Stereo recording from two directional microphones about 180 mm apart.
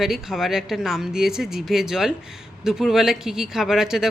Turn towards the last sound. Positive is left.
turn(degrees=-5)  # may be behind; listen again after turning